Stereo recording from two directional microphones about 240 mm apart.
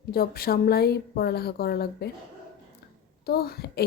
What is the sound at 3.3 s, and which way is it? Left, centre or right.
Speech, left.